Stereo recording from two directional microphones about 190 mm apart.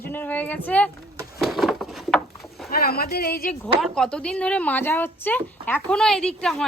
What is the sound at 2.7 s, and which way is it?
Speech, 50° left (ahead or behind).